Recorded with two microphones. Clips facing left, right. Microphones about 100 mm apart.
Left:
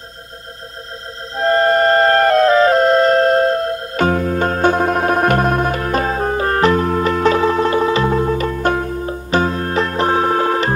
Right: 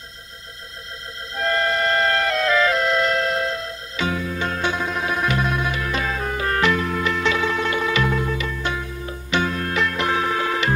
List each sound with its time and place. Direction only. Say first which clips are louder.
1.3 s music: left 8 dB; 35° left (ahead or behind)